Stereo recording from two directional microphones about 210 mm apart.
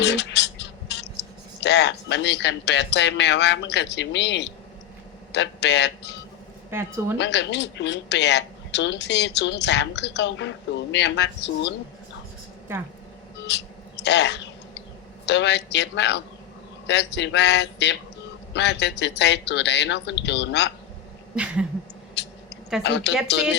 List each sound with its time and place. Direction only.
0.0 s a sound: 55° left (ahead or behind)
1.6 s speech: 55° left (ahead or behind)
6.7 s a woman's voice: 10° right (ahead or behind)
7.2 s speech: 55° left (ahead or behind)
13.5 s mouse: 55° left (ahead or behind)
15.3 s speech: 55° left (ahead or behind)
21.3 s a sound: 5° right (ahead or behind)
22.2 s a sound: 55° left (ahead or behind)
22.8 s speech: 55° left (ahead or behind)